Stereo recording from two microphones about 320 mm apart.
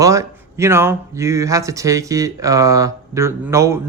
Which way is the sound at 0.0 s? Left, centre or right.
Centre.